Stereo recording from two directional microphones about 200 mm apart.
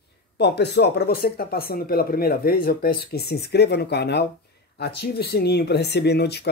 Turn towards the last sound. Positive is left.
turn(degrees=55)  # may be behind; listen again after turning